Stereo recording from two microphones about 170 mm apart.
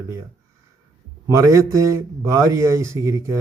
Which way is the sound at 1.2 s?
15° right (ahead or behind).